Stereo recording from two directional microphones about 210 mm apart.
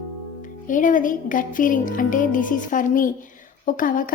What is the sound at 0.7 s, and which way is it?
A woman's voice, 40° left (ahead or behind).